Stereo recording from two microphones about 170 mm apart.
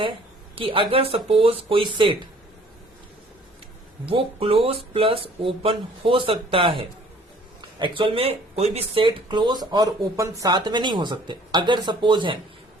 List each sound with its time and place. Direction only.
0.5 s speech: 30° right (ahead or behind)
4.0 s speech: 35° right (ahead or behind)